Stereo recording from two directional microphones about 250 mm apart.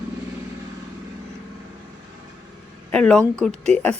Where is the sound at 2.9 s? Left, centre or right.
Centre.